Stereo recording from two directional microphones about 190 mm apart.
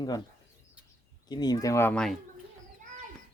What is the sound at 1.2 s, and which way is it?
Speech, 20° left (ahead or behind).